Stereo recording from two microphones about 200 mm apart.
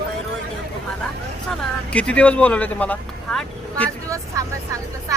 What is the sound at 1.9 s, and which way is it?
Speech, 5° left (ahead or behind).